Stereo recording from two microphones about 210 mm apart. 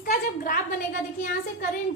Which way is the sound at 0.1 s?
45° left (ahead or behind).